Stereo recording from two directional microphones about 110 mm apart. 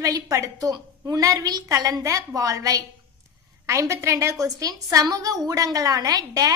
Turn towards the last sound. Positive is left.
turn(degrees=-35)  # may be behind; listen again after turning